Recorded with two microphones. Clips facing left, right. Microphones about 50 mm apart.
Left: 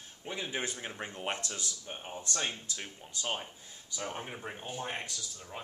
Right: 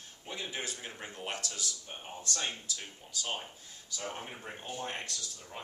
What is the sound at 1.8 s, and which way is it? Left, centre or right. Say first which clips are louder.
Speech: left 1 dB; centre.